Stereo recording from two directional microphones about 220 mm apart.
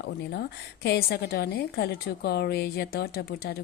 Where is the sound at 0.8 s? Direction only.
45° left (ahead or behind).